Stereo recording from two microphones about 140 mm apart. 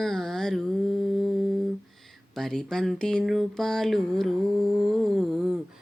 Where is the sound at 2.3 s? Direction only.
5° left (ahead or behind).